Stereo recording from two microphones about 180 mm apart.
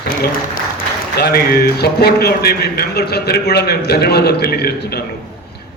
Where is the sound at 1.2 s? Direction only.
60° left (ahead or behind).